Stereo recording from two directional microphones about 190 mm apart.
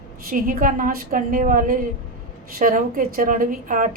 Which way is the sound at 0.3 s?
45° right (ahead or behind).